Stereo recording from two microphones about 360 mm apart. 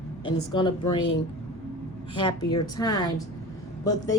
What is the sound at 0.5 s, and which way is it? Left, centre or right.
A woman's voice, centre.